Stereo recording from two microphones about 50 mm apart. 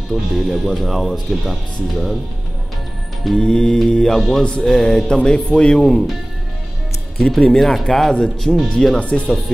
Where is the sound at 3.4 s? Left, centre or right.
Centre.